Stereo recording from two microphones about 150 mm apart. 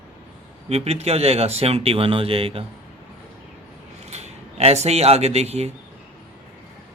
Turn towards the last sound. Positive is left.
turn(degrees=-45)  # may be behind; listen again after turning